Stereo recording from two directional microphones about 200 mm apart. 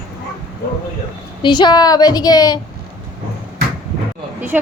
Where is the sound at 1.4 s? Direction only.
20° left (ahead or behind).